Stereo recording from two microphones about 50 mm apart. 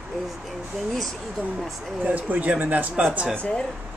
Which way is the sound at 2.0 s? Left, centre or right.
Right.